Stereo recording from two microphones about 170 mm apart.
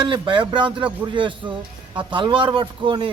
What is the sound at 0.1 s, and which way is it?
A man's voice, 30° right (ahead or behind).